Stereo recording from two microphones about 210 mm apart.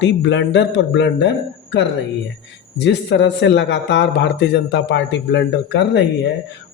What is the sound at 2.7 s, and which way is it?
A man's voice, 55° left (ahead or behind).